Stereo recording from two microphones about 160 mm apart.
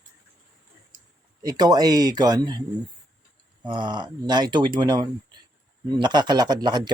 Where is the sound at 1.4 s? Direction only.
25° right (ahead or behind).